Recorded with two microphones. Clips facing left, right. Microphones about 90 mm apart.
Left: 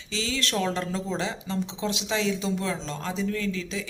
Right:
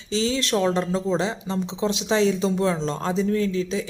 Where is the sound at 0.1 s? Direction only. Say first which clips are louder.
Right 7 dB; 30° right (ahead or behind).